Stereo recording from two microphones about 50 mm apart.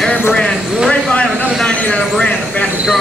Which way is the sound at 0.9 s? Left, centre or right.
Left.